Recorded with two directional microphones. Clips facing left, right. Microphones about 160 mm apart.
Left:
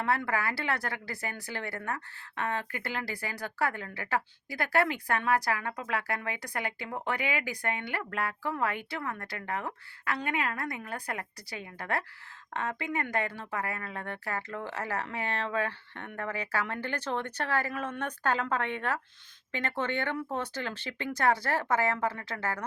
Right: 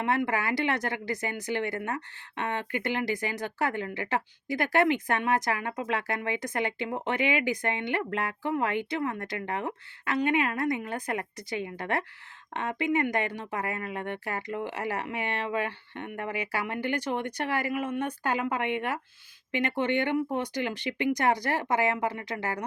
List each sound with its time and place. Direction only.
0.0 s a woman's voice: 20° right (ahead or behind)